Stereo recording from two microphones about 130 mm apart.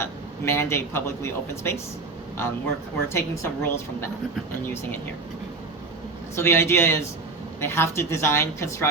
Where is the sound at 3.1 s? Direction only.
20° left (ahead or behind).